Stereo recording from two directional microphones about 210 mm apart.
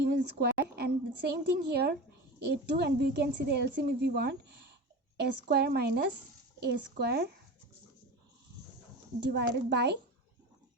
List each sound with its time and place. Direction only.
0.0 s a woman's voice: 50° right (ahead or behind)
9.3 s a woman's voice: 55° right (ahead or behind)